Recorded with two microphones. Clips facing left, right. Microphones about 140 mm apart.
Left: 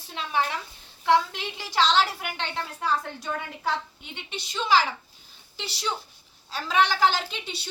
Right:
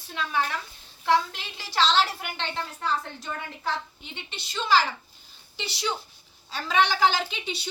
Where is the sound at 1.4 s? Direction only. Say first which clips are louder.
Left 1 dB; 15° left (ahead or behind).